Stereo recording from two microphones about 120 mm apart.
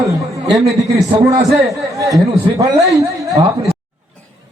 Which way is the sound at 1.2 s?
25° right (ahead or behind).